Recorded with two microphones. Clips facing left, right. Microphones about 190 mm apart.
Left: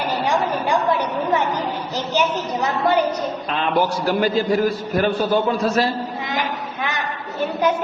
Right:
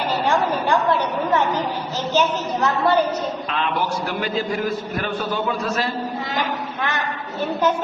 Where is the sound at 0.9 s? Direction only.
15° left (ahead or behind).